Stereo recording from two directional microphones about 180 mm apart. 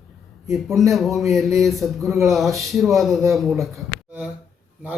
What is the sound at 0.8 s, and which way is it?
A man's voice, centre (ahead or behind).